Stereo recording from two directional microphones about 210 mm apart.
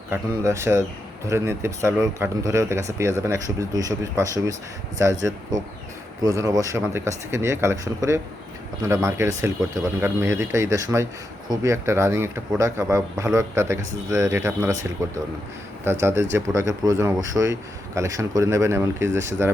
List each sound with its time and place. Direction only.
0.1 s a man's voice: 10° right (ahead or behind)
6.2 s a man's voice: 15° right (ahead or behind)
15.8 s a man's voice: 10° right (ahead or behind)